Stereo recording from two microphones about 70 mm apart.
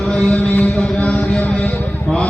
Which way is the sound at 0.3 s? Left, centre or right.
Left.